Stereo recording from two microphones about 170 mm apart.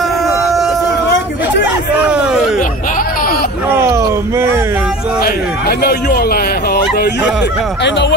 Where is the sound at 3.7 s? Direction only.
15° right (ahead or behind).